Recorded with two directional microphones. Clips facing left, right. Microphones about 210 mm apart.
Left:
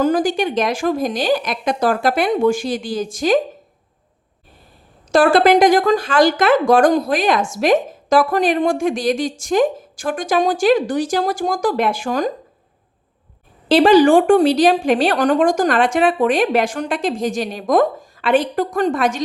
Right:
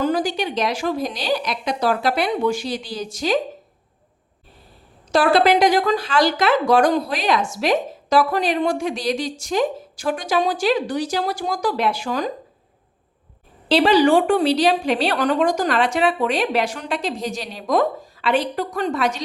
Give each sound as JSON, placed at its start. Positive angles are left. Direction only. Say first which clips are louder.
{"t": 0.0, "sound": "speech", "louder": "left 4 dB", "side_deg": 50}
{"t": 5.1, "sound": "speech", "louder": "left 4 dB", "side_deg": 50}
{"t": 13.7, "sound": "speech", "louder": "left 4 dB", "side_deg": 50}